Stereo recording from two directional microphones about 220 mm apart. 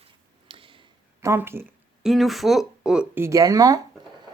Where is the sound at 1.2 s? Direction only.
10° right (ahead or behind).